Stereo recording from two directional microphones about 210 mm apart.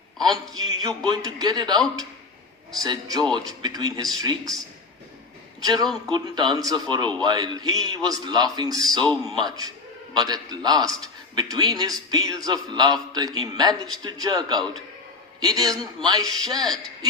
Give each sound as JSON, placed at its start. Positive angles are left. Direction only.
{"t": 0.2, "sound": "a man's voice", "side_deg": -20}
{"t": 2.8, "sound": "a man's voice", "side_deg": -20}
{"t": 5.6, "sound": "a man's voice", "side_deg": -20}